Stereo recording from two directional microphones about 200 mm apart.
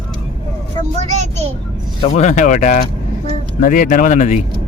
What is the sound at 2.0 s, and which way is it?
Speech, 35° left (ahead or behind).